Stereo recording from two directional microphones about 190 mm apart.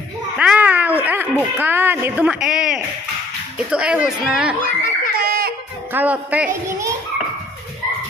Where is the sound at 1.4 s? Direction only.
10° right (ahead or behind).